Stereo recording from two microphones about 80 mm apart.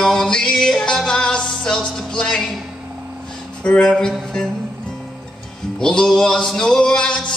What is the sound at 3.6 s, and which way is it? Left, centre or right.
Music, centre.